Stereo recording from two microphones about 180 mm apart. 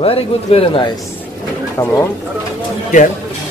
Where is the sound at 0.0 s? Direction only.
30° left (ahead or behind).